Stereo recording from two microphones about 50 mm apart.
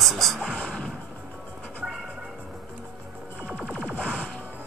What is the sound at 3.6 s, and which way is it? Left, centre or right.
Music, right.